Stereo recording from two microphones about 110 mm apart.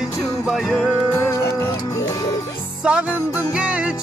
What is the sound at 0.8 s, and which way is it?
Music, 15° left (ahead or behind).